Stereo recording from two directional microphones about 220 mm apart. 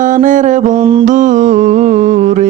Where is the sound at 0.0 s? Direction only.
35° right (ahead or behind).